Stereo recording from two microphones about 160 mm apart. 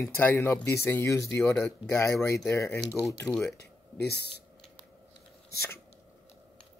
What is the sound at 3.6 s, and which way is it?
Speech, 90° left.